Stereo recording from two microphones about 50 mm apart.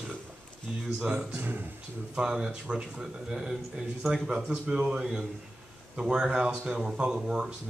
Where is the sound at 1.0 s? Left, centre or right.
Right.